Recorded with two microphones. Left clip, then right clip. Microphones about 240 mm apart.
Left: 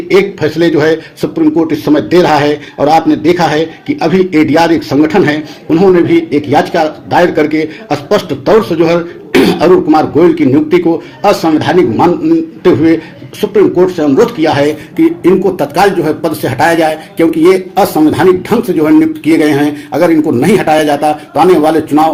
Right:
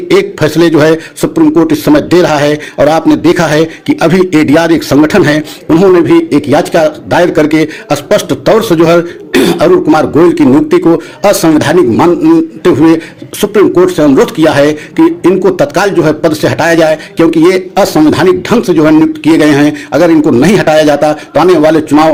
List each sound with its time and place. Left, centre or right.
0.1 s a man's voice: right